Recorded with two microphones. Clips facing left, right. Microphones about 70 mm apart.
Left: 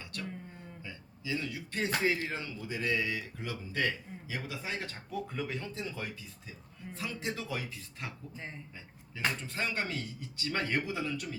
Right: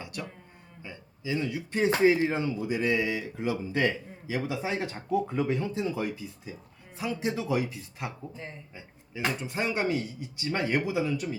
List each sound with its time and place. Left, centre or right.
0.0 s a sound: centre
0.9 s speech: right
9.1 s speech: centre